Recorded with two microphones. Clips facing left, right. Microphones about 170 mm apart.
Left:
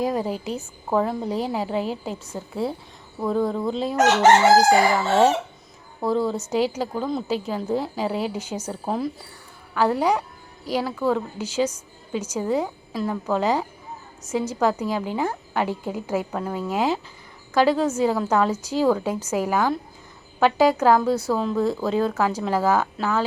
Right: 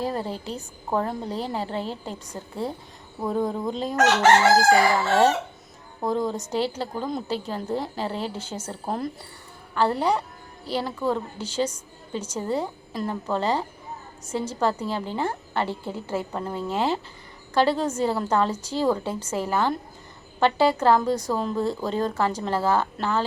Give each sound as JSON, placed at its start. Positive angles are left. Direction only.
{"t": 0.0, "sound": "a woman's voice", "side_deg": 10}
{"t": 3.7, "sound": "chicken", "side_deg": 0}
{"t": 4.2, "sound": "a woman's voice", "side_deg": 20}
{"t": 6.0, "sound": "a woman's voice", "side_deg": -15}
{"t": 6.5, "sound": "a woman's voice", "side_deg": 10}
{"t": 21.3, "sound": "chicken", "side_deg": 0}
{"t": 21.6, "sound": "a woman's voice", "side_deg": 10}